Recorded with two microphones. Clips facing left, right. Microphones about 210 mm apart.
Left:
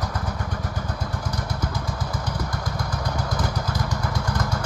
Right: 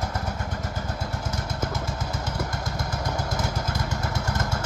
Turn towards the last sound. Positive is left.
turn(degrees=-25)  # may be behind; listen again after turning